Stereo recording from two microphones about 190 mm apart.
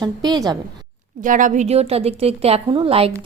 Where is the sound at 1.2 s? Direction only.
45° right (ahead or behind).